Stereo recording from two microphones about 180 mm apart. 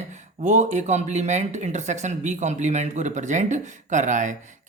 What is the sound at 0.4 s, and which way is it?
Speech, 40° right (ahead or behind).